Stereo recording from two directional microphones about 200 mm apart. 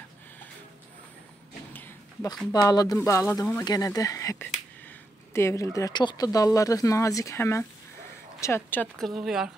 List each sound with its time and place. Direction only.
2.5 s speech: 20° left (ahead or behind); by 9.5 s centre (ahead or behind)